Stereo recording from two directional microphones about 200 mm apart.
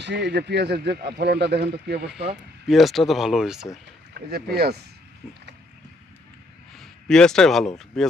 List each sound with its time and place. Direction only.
0.0 s speech: 60° right (ahead or behind)
2.6 s speech: centre (ahead or behind)
4.1 s speech: 50° right (ahead or behind)
6.7 s speech: centre (ahead or behind)